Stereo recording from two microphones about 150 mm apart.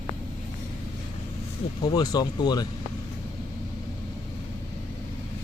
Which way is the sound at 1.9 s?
25° left (ahead or behind).